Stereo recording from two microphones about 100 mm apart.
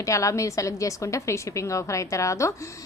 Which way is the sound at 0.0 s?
30° left (ahead or behind).